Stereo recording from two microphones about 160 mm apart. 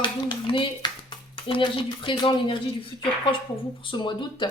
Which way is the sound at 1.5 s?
30° left (ahead or behind).